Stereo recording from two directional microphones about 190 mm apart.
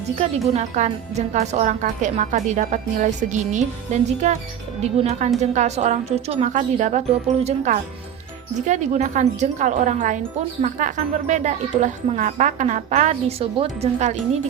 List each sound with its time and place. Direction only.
0.2 s speech: 40° right (ahead or behind)
5.4 s speech: 35° right (ahead or behind)